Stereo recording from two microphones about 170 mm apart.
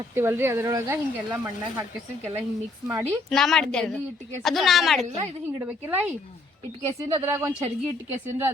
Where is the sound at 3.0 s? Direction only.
Centre (ahead or behind).